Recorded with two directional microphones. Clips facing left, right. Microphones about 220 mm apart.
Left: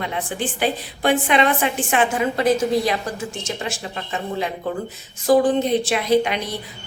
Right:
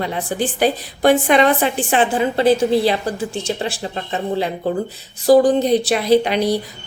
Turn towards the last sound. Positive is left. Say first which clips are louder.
# right 4 dB
turn(degrees=-35)  # may be behind; listen again after turning